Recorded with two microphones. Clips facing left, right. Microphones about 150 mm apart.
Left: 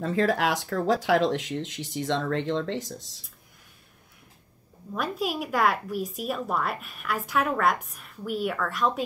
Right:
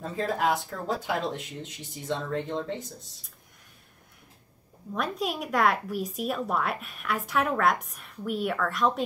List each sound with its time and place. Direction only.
0.0 s speech: 85° left
4.9 s speech: centre (ahead or behind)